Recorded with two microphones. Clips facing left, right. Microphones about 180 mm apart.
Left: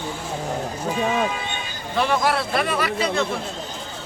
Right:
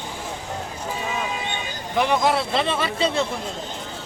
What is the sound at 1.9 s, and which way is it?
A man's voice, 15° right (ahead or behind).